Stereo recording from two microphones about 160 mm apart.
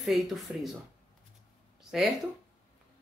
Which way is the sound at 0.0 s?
Centre (ahead or behind).